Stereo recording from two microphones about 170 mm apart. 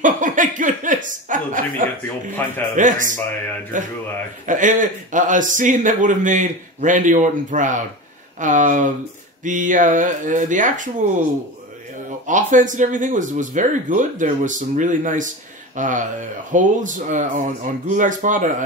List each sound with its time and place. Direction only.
0.0 s chuckle: 50° right (ahead or behind)
2.7 s speech: 50° right (ahead or behind)
12.3 s speech: 50° right (ahead or behind)